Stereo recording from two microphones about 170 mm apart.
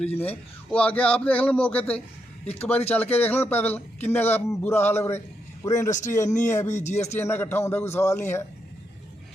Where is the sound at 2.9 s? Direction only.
10° left (ahead or behind).